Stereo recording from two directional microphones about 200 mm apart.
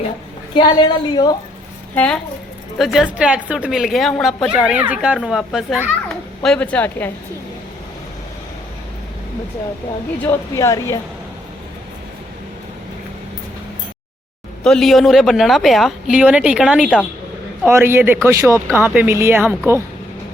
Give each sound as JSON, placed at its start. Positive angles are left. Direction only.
{"t": 0.5, "sound": "a woman's voice", "side_deg": 20}
{"t": 2.7, "sound": "a child's voice", "side_deg": 0}
{"t": 10.5, "sound": "speech", "side_deg": 15}
{"t": 14.6, "sound": "a child's voice", "side_deg": 0}